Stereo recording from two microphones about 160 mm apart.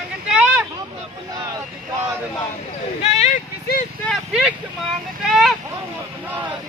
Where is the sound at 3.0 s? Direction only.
45° left (ahead or behind).